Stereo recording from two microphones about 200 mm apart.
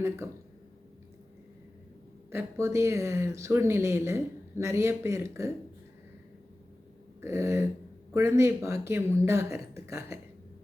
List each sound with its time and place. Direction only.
0.2 s speech: 15° right (ahead or behind)
2.3 s speech: 10° right (ahead or behind)
7.2 s speech: 15° right (ahead or behind)